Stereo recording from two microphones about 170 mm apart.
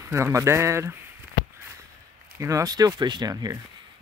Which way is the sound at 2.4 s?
20° right (ahead or behind).